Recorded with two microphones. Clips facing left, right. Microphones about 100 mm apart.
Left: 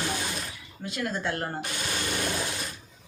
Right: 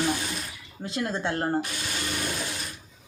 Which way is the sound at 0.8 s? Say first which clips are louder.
Right 2 dB; 30° right (ahead or behind).